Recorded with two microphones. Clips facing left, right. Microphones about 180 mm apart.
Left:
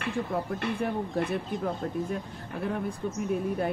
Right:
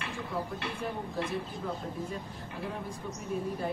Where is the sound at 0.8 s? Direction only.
60° left (ahead or behind).